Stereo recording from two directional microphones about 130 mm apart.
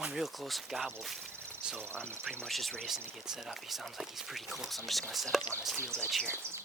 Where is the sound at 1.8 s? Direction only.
20° right (ahead or behind).